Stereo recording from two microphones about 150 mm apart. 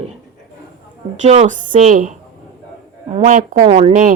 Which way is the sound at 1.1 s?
50° right (ahead or behind).